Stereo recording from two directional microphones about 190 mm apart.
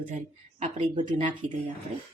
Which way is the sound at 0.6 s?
30° right (ahead or behind).